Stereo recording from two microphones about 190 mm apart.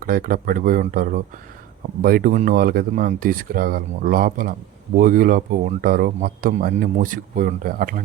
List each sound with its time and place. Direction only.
0.0 s speech: 45° right (ahead or behind)